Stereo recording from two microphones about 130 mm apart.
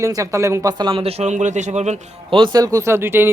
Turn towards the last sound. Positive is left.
turn(degrees=-15)  # may be behind; listen again after turning